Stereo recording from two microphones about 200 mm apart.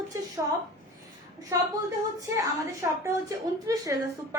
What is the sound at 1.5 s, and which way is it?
Speech, 15° right (ahead or behind).